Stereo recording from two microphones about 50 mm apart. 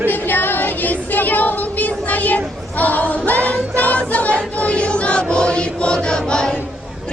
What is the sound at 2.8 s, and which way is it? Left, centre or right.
Music, left.